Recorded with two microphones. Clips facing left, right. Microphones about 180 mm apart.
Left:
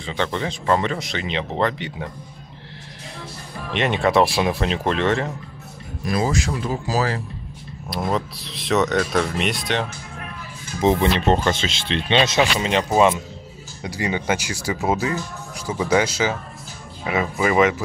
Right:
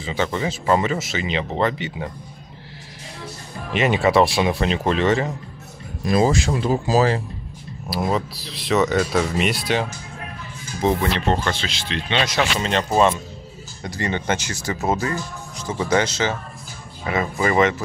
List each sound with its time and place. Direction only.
0.0 s speech: 5° right (ahead or behind)
3.7 s speech: 5° right (ahead or behind)
6.0 s speech: 25° right (ahead or behind)
7.9 s speech: centre (ahead or behind)
10.8 s speech: 20° left (ahead or behind)